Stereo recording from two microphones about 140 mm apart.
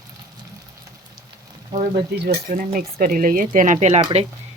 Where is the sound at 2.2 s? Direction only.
85° right.